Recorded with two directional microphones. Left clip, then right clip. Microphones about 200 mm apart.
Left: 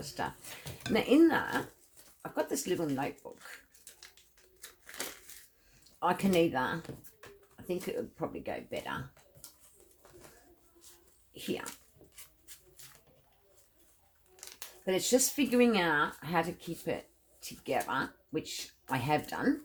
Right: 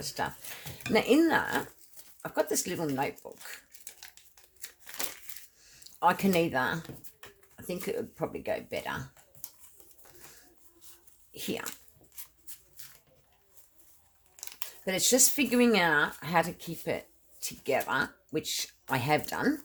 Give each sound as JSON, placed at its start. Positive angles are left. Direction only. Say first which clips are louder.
{"t": 0.2, "sound": "speech", "louder": "right 2 dB", "side_deg": -45}
{"t": 6.0, "sound": "speech", "louder": "right 3 dB", "side_deg": -45}
{"t": 7.6, "sound": "a sound", "louder": "even", "side_deg": -45}
{"t": 8.1, "sound": "speech", "louder": "right 5 dB", "side_deg": -45}
{"t": 11.3, "sound": "speech", "louder": "right 2 dB", "side_deg": -45}
{"t": 14.8, "sound": "speech", "louder": "right 3 dB", "side_deg": -45}